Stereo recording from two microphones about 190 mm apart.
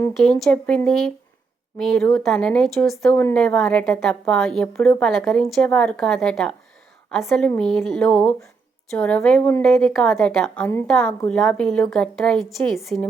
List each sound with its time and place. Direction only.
0.2 s speech: centre (ahead or behind)